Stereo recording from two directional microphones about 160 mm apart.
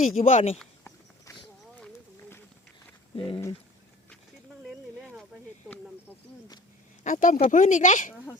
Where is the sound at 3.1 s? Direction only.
30° left (ahead or behind).